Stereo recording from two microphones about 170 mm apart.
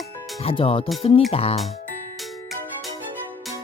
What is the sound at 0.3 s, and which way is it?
Speech, 35° left (ahead or behind).